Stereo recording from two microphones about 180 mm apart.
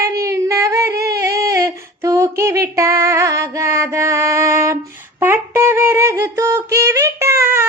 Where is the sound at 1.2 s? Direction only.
15° right (ahead or behind).